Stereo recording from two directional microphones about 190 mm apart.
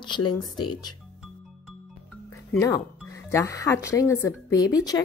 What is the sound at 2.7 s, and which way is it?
Speech, 15° left (ahead or behind).